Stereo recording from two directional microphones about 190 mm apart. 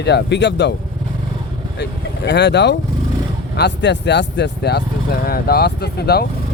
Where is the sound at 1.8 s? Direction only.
65° left (ahead or behind).